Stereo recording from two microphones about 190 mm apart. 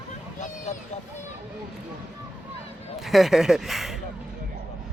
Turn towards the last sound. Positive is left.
turn(degrees=0)  # may be behind; listen again after turning